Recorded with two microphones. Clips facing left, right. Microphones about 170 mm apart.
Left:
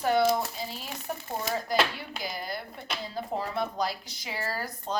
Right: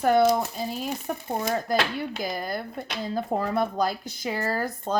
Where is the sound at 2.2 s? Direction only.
50° right (ahead or behind).